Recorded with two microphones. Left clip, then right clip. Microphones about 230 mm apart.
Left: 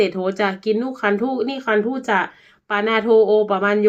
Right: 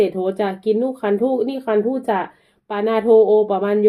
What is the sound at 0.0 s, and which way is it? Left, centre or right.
Speech, left.